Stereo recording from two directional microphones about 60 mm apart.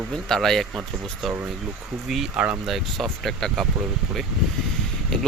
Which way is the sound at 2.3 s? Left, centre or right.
Right.